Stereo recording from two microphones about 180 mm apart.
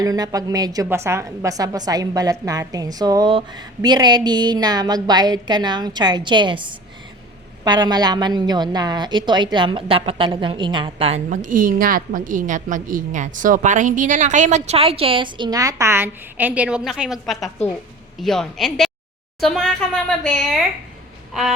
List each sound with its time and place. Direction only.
0.0 s a woman's voice: 20° right (ahead or behind)
11.3 s a woman's voice: 50° right (ahead or behind); by 20.6 s centre (ahead or behind)